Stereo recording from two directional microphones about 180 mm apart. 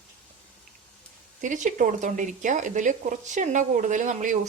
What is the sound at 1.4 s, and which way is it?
Speech, 45° right (ahead or behind).